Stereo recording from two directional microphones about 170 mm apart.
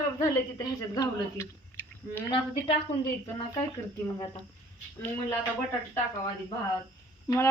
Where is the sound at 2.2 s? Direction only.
25° left (ahead or behind).